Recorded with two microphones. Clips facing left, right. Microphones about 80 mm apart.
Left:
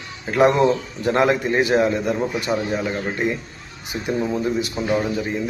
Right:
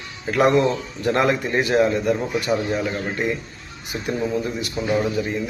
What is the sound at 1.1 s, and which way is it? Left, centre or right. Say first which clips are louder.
Speech: left 2 dB; left.